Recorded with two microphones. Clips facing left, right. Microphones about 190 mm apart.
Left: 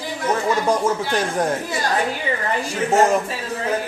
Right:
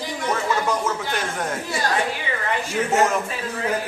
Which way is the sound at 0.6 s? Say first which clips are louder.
Left 4 dB; 35° left (ahead or behind).